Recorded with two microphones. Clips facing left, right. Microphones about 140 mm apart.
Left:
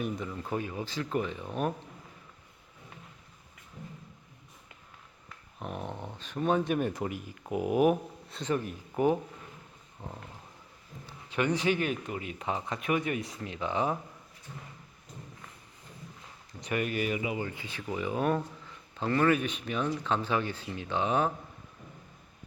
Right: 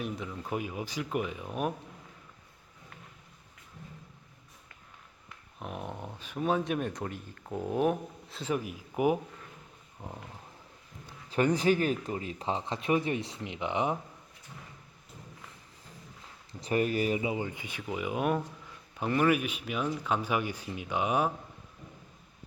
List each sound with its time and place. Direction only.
0.0 s speech: centre (ahead or behind)
5.5 s speech: centre (ahead or behind)
8.4 s speech: 10° right (ahead or behind)
11.3 s speech: 40° right (ahead or behind); by 13.9 s 20° right (ahead or behind)
16.6 s speech: 30° right (ahead or behind); by 21.3 s 10° right (ahead or behind)